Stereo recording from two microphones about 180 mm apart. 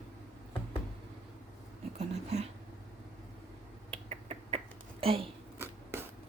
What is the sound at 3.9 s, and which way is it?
Finger snapping, 35° right (ahead or behind).